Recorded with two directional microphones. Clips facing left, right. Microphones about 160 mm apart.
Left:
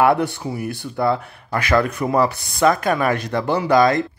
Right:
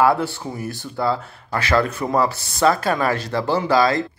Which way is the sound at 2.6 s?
30° right (ahead or behind).